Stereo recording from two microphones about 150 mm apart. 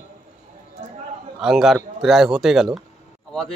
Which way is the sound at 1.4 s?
Centre (ahead or behind).